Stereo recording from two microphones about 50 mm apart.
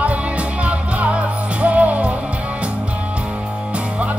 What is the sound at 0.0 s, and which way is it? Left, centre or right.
Music, right.